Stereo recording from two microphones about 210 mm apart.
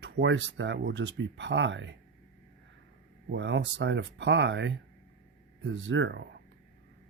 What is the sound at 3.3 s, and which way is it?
Speech, 55° right (ahead or behind).